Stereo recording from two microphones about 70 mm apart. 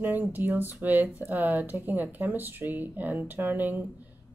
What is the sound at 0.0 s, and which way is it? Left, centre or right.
Speech, right.